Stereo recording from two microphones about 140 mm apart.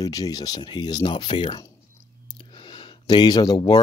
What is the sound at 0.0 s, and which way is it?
Speech, 25° left (ahead or behind).